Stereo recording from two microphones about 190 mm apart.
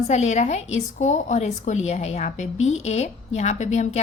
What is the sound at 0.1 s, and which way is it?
A woman's voice, 35° left (ahead or behind).